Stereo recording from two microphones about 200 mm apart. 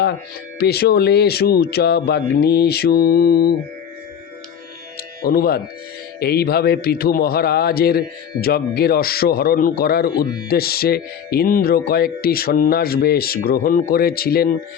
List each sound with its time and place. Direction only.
0.6 s a man's voice: 50° left (ahead or behind)
5.2 s a man's voice: 50° left (ahead or behind)